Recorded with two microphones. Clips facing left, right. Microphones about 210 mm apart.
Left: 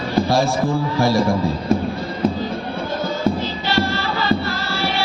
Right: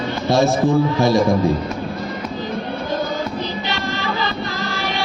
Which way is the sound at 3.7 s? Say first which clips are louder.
Left 3 dB; 15° right (ahead or behind).